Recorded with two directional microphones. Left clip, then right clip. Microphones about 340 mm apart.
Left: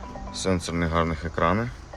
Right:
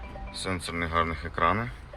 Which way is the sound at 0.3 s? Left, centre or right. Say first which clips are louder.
Left 6 dB; centre.